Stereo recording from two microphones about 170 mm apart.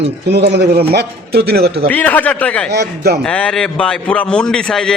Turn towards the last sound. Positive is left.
turn(degrees=5)  # may be behind; listen again after turning